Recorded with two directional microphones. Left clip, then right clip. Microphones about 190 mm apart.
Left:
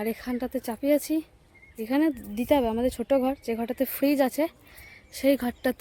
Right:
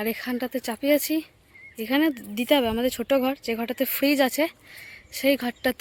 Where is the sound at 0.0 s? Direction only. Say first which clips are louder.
Right 2 dB; centre (ahead or behind).